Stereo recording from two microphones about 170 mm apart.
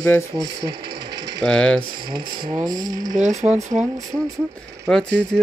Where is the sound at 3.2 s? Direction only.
45° right (ahead or behind).